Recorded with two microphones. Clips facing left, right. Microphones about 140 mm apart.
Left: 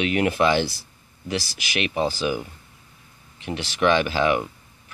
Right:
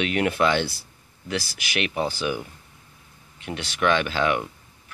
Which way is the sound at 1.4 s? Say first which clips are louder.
Left 1 dB; 55° right (ahead or behind).